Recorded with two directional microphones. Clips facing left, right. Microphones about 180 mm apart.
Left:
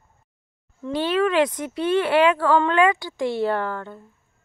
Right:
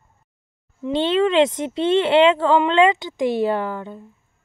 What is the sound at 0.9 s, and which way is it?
Speech, 25° right (ahead or behind).